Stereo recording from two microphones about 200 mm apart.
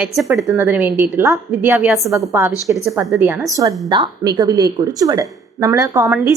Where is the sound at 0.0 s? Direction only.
Centre (ahead or behind).